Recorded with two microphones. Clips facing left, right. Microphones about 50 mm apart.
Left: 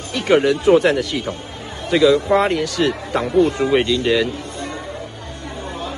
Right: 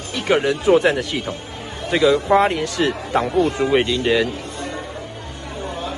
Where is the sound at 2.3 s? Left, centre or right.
Centre.